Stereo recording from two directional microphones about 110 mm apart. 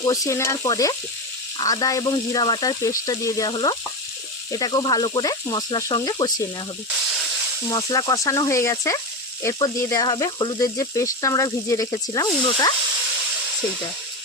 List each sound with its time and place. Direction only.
0.0 s sizzle: 35° left (ahead or behind)
3.5 s frying: 45° left (ahead or behind)
4.5 s sizzle: 40° left (ahead or behind)
7.7 s sizzle: 35° left (ahead or behind)
10.6 s sizzle: 30° left (ahead or behind)